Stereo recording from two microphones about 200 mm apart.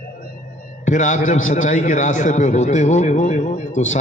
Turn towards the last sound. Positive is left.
turn(degrees=40)  # may be behind; listen again after turning